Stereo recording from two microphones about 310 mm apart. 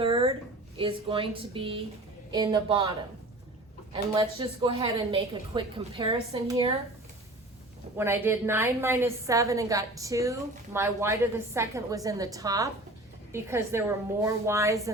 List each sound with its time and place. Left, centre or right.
0.0 s a sound: centre
0.8 s a woman's voice: centre
3.9 s a woman's voice: centre
7.9 s a woman's voice: centre